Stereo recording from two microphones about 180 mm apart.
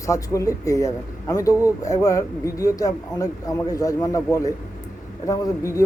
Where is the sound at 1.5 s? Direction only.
10° right (ahead or behind).